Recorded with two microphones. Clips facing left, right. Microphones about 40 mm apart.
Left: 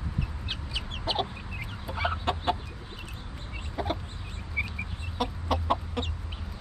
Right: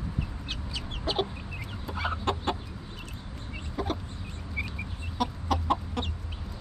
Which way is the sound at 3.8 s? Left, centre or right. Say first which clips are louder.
Even; centre.